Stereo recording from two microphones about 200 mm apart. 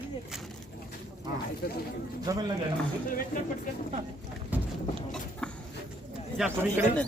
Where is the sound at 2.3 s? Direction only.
20° right (ahead or behind).